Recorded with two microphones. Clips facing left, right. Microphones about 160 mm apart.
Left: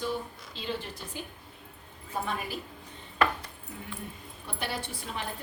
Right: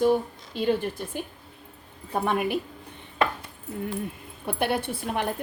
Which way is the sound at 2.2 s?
60° right (ahead or behind).